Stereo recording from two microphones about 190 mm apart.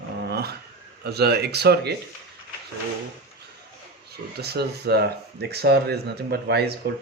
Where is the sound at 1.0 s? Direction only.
60° right (ahead or behind).